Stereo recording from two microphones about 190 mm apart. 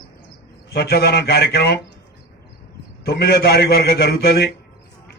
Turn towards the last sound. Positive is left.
turn(degrees=55)  # may be behind; listen again after turning